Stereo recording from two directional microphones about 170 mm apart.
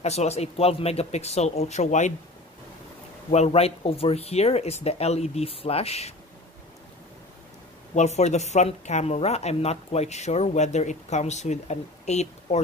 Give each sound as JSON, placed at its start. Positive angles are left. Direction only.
{"t": 0.0, "sound": "speech", "side_deg": 40}
{"t": 3.3, "sound": "speech", "side_deg": 40}
{"t": 7.9, "sound": "speech", "side_deg": 40}